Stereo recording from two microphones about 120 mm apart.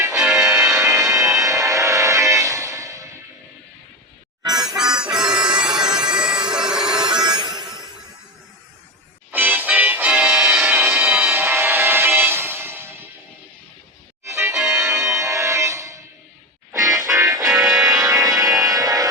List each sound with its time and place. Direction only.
0.3 s music: 25° right (ahead or behind)
4.8 s music: 5° right (ahead or behind)
7.2 s a sound: 35° right (ahead or behind)
9.3 s music: 15° right (ahead or behind)
10.6 s music: 20° right (ahead or behind)
14.3 s music: 25° right (ahead or behind)
17.5 s music: 5° right (ahead or behind)
18.0 s music: 30° right (ahead or behind)